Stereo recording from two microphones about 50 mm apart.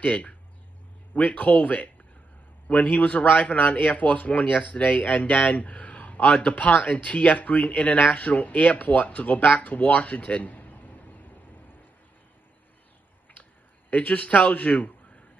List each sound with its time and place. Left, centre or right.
0.0 s a man's voice: left
13.4 s speech: left